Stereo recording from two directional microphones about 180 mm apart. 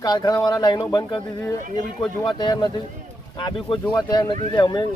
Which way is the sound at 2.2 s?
25° left (ahead or behind).